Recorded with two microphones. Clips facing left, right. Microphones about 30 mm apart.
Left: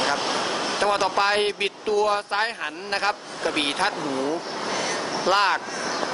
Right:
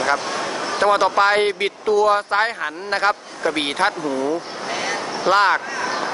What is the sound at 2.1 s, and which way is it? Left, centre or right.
Speech, centre.